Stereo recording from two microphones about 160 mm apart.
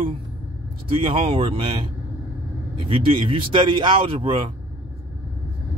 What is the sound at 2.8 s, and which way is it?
Speech, 35° right (ahead or behind).